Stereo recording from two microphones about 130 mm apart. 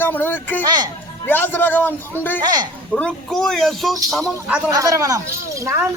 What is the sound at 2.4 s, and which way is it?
Speech, 30° right (ahead or behind).